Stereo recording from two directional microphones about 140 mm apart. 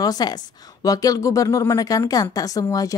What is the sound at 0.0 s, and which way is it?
Speech, 30° left (ahead or behind).